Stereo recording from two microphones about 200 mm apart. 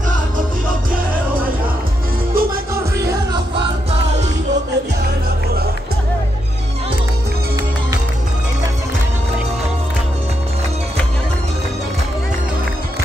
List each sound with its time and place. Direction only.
2.3 s music: 45° right (ahead or behind)